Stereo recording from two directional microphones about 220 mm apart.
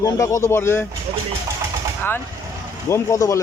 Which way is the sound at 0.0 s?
15° left (ahead or behind).